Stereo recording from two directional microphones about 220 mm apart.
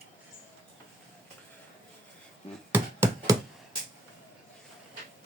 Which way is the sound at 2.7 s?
10° right (ahead or behind).